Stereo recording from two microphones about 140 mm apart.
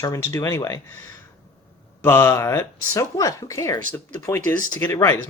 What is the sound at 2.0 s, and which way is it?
Speech, 15° left (ahead or behind).